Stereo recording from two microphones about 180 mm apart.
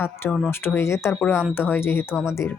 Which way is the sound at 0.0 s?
10° left (ahead or behind).